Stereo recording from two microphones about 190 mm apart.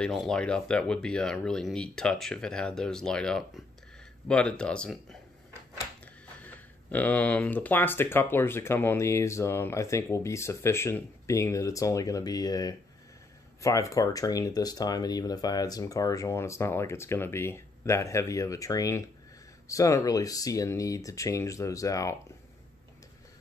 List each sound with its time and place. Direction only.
0.0 s speech: centre (ahead or behind)
6.4 s speech: 10° left (ahead or behind)